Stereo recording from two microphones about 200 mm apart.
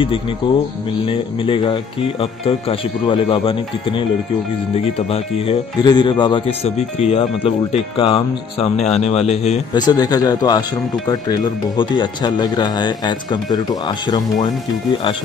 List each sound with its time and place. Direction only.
0.4 s speech: 25° left (ahead or behind)
9.8 s speech: 20° left (ahead or behind)